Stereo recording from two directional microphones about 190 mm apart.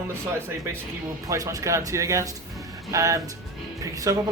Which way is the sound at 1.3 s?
15° right (ahead or behind).